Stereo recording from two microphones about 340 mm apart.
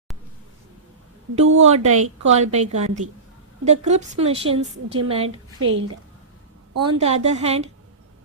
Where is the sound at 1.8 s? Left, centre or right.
Right.